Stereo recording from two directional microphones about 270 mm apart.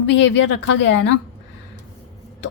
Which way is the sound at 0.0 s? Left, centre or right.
Left.